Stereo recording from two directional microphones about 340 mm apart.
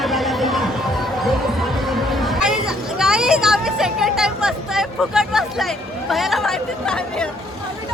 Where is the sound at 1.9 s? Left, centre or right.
Centre.